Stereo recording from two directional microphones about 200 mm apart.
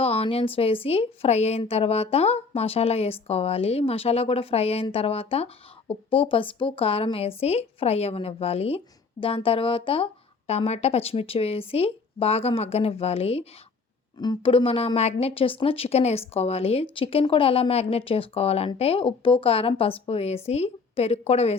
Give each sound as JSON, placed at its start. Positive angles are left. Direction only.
{"t": 0.0, "sound": "a woman's voice", "side_deg": 30}